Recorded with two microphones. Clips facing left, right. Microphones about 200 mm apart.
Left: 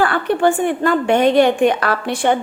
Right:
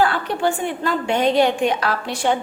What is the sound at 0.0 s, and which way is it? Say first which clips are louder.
A woman's voice: left 4 dB; 55° left (ahead or behind).